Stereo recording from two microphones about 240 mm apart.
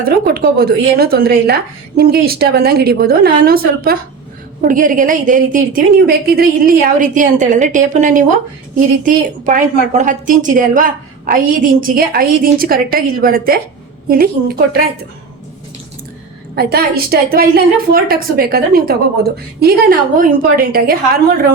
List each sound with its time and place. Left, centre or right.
0.0 s a woman's voice: right
4.7 s a woman's voice: right
16.6 s a woman's voice: right